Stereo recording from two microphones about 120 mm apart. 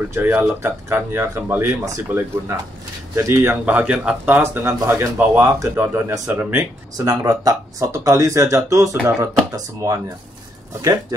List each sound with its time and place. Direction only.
0.1 s speech: 15° right (ahead or behind)
3.6 s speech: 10° right (ahead or behind); by 11.1 s 30° right (ahead or behind)